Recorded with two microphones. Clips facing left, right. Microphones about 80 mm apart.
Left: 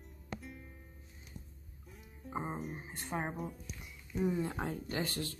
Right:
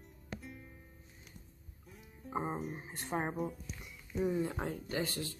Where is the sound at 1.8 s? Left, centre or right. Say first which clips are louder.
Right 1 dB; centre.